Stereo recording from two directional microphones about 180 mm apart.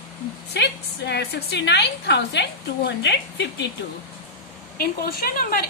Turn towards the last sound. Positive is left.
turn(degrees=55)  # may be behind; listen again after turning